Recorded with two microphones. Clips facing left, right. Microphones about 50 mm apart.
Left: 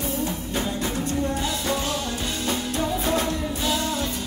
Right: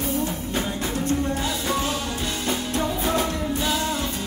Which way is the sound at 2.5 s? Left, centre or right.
Centre.